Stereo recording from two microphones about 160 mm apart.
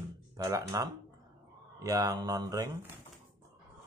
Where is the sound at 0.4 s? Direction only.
20° right (ahead or behind).